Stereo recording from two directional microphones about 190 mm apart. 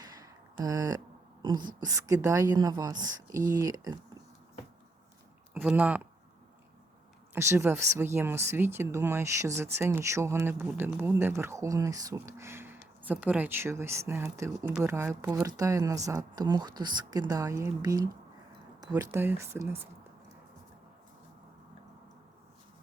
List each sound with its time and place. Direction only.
0.0 s a sound: 20° right (ahead or behind)
0.6 s speech: 20° right (ahead or behind)
5.5 s speech: 10° right (ahead or behind)
7.3 s speech: 15° right (ahead or behind)